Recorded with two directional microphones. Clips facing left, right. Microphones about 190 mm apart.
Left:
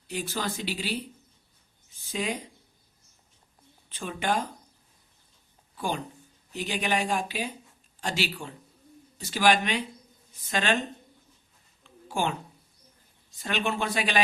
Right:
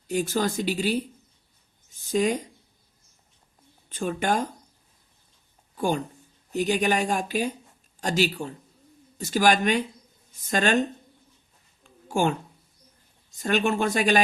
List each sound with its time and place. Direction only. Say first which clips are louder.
0.1 s speech: right 7 dB; 45° right (ahead or behind)
1.9 s a sound: right 8 dB; 45° right (ahead or behind)
3.8 s speech: right 4 dB; 45° right (ahead or behind)
5.7 s a man's voice: right 6 dB; 45° right (ahead or behind)
11.8 s a sound: right 5 dB; 45° right (ahead or behind)
13.4 s speech: right 6 dB; 45° right (ahead or behind)